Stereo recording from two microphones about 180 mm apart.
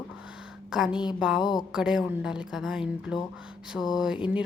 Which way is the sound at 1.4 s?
25° left (ahead or behind).